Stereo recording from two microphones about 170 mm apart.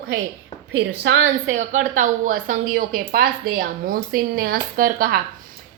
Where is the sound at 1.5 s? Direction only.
45° right (ahead or behind).